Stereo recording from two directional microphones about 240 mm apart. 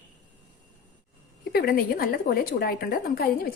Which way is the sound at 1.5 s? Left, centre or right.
Left.